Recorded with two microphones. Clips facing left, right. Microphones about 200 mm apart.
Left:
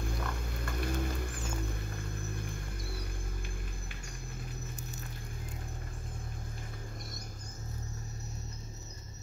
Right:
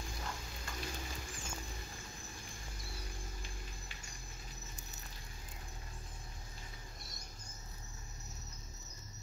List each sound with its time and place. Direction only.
0.0 s music: 60° left (ahead or behind)